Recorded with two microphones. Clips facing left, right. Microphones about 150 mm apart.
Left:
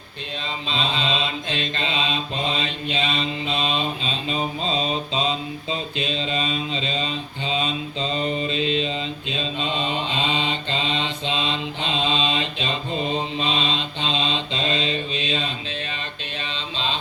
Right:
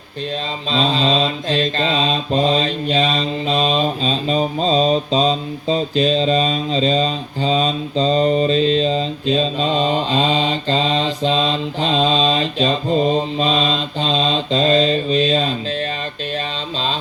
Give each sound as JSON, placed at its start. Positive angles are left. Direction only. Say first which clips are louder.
{"t": 0.7, "sound": "mantra", "louder": "right 8 dB", "side_deg": -40}